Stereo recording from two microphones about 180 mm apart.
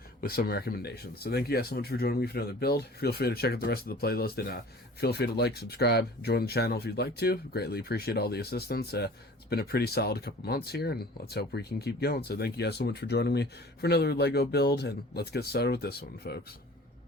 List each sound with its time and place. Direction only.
0.2 s speech: 55° left (ahead or behind)